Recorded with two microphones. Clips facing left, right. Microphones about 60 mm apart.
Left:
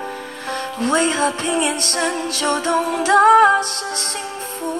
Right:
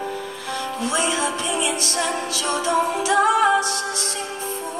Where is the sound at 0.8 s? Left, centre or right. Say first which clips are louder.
Left 6 dB; left.